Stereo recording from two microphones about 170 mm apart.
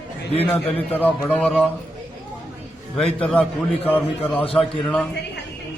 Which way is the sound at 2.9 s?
5° left (ahead or behind).